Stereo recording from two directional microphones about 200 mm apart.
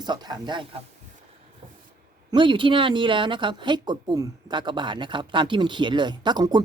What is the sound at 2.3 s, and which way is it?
Speech, 25° right (ahead or behind).